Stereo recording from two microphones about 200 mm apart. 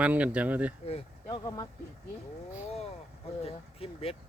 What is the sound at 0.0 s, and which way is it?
Speech, 5° right (ahead or behind).